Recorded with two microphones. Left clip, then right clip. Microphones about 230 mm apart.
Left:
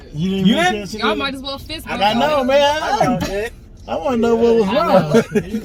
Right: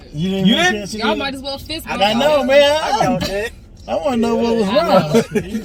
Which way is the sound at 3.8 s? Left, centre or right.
Centre.